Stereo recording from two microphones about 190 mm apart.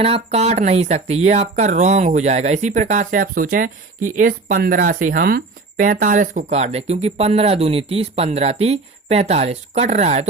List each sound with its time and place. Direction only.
0.0 s speech: 30° right (ahead or behind)